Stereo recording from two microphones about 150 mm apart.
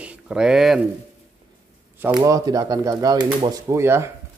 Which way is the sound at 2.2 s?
25° right (ahead or behind).